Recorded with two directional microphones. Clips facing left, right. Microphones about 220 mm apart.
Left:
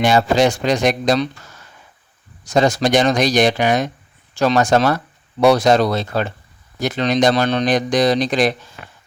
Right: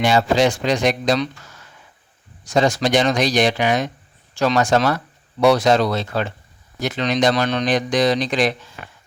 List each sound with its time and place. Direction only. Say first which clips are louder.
0.0 s speech: left 2 dB; 45° left (ahead or behind)
2.4 s speech: left 2 dB; 40° left (ahead or behind)